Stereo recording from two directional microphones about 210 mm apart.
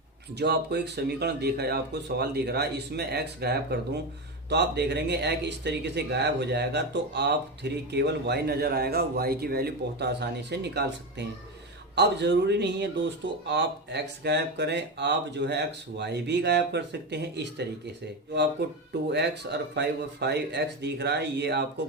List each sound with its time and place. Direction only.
0.3 s speech: 50° right (ahead or behind)
19.1 s speech: 55° right (ahead or behind)